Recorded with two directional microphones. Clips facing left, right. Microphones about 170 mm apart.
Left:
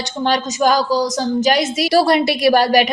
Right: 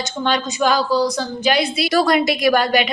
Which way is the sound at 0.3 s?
40° left (ahead or behind).